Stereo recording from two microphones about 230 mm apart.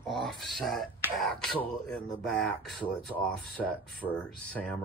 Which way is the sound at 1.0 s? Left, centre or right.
Centre.